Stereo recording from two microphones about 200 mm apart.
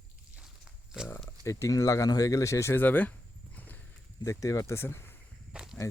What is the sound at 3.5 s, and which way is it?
Horse, 10° left (ahead or behind).